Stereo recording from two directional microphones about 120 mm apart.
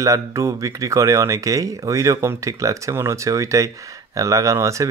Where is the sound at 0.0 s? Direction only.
30° right (ahead or behind).